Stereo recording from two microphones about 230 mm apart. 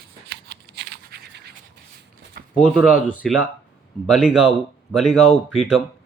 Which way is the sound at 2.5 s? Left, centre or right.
Centre.